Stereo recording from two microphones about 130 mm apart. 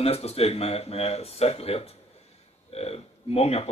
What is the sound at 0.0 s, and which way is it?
Speech, 50° left (ahead or behind).